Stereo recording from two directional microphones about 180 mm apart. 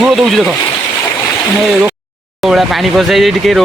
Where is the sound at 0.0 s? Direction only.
Centre (ahead or behind).